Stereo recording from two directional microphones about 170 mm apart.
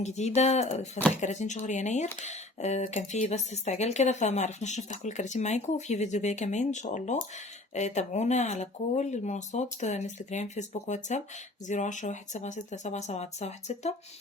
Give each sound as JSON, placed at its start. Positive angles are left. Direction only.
{"t": 0.0, "sound": "speech", "side_deg": 40}